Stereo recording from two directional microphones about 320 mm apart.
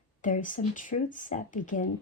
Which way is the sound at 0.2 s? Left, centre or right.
Left.